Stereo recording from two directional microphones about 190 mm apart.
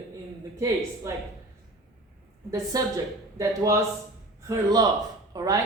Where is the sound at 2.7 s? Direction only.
20° right (ahead or behind).